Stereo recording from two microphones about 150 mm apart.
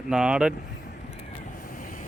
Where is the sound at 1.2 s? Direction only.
60° left (ahead or behind).